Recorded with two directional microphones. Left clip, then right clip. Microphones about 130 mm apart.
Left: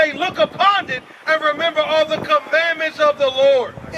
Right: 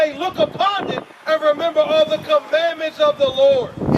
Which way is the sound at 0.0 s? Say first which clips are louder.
Left 1 dB; 35° left (ahead or behind).